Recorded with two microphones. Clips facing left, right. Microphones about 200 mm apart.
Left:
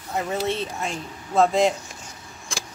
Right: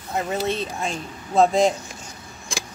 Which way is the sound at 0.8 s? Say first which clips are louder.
Right 2 dB; 15° right (ahead or behind).